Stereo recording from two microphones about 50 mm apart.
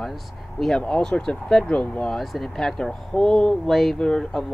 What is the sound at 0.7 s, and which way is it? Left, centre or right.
Speech, left.